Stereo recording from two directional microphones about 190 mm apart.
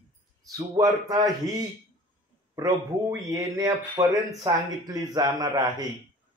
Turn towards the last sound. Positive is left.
turn(degrees=-20)  # may be behind; listen again after turning